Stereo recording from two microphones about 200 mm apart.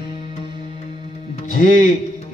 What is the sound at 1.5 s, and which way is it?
Speech, 40° left (ahead or behind).